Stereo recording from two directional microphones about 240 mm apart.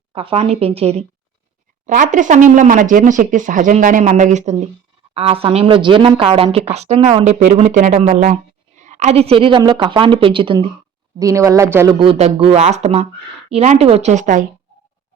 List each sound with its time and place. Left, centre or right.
0.1 s speech: right